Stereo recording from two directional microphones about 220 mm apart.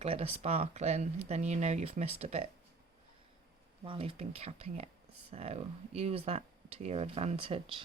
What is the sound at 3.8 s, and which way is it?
Speech, 25° right (ahead or behind).